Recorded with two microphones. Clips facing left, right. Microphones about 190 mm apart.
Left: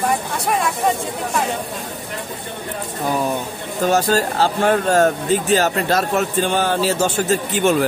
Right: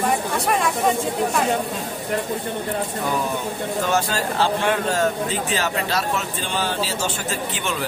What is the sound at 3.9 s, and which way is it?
Speech, 40° left (ahead or behind).